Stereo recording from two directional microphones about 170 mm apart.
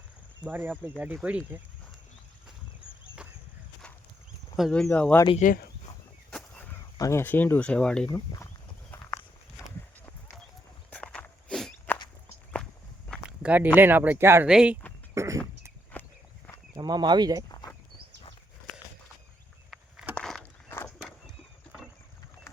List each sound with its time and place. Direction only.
0.4 s speech: 10° right (ahead or behind)
4.5 s speech: centre (ahead or behind)
5.4 s speech: 60° left (ahead or behind)
6.3 s whip: 10° left (ahead or behind)
6.9 s speech: 15° left (ahead or behind)
8.0 s speech: 20° left (ahead or behind)
8.9 s walk: 15° left (ahead or behind)
10.9 s walk: 5° left (ahead or behind)
13.4 s speech: 10° right (ahead or behind)
15.1 s cough: 15° right (ahead or behind)
15.9 s walk: 10° left (ahead or behind)
16.7 s speech: 25° right (ahead or behind)
19.7 s a sound: 5° right (ahead or behind)
20.1 s walk: 5° left (ahead or behind)